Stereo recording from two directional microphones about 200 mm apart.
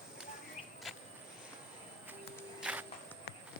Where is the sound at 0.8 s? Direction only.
Centre (ahead or behind).